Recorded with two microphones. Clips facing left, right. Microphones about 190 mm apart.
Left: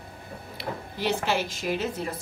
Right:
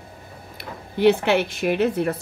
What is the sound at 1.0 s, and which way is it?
Speech, 60° right (ahead or behind).